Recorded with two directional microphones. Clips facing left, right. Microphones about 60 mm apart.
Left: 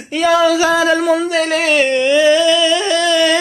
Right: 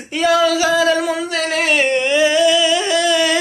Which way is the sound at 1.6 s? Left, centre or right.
Centre.